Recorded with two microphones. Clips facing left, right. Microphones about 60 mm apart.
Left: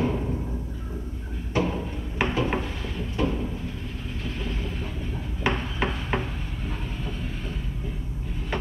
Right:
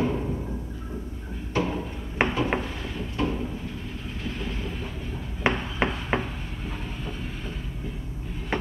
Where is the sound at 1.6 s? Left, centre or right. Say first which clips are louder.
Left 1 dB; centre.